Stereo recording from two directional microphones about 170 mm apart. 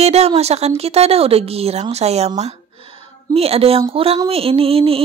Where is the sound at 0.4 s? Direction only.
40° right (ahead or behind).